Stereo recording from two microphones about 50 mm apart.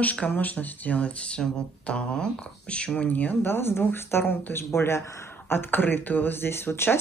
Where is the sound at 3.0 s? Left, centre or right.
Left.